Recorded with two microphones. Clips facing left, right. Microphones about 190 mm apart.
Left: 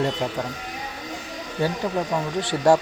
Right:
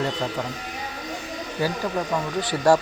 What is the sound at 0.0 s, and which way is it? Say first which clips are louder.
Speech: left 2 dB; 15° left (ahead or behind).